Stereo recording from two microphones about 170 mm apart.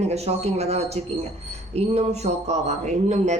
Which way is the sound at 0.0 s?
40° right (ahead or behind).